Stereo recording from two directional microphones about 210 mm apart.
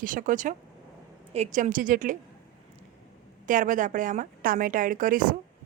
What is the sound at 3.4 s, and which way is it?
A woman's voice, 40° right (ahead or behind).